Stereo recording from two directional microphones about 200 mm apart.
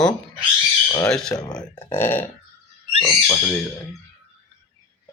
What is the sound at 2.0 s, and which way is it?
Burping, 10° left (ahead or behind).